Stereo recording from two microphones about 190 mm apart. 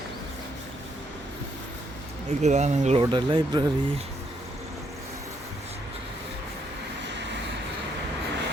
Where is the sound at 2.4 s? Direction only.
35° right (ahead or behind).